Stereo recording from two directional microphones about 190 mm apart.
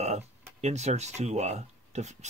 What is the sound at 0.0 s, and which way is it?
Speech, 35° right (ahead or behind).